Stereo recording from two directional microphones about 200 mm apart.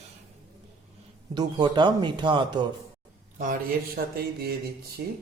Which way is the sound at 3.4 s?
45° right (ahead or behind).